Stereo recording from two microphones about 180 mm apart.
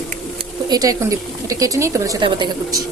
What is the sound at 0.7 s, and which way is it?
Speech, 20° right (ahead or behind).